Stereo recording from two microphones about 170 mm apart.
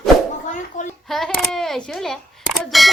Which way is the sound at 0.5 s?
45° left (ahead or behind).